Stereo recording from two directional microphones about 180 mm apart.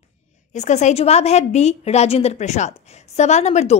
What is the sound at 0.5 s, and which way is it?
A woman's voice, 40° left (ahead or behind).